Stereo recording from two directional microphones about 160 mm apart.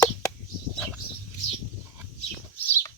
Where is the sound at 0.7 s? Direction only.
5° left (ahead or behind).